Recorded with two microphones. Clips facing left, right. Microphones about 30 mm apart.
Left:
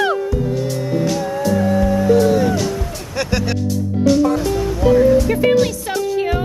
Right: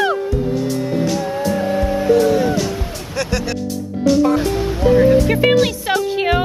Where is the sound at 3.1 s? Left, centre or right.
Centre.